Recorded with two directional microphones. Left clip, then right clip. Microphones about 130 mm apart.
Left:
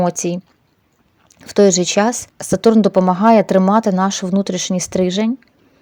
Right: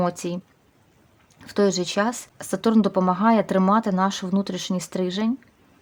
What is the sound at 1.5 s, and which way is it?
Speech, 35° left (ahead or behind).